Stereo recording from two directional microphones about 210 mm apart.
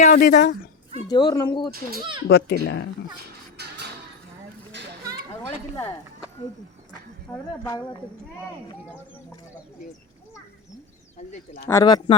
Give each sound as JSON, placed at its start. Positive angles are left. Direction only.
{"t": 0.0, "sound": "speech", "side_deg": 35}
{"t": 1.0, "sound": "speech", "side_deg": 20}
{"t": 2.2, "sound": "a child's voice", "side_deg": 50}
{"t": 3.6, "sound": "music", "side_deg": -50}
{"t": 11.2, "sound": "speech", "side_deg": 35}
{"t": 11.6, "sound": "speech", "side_deg": 15}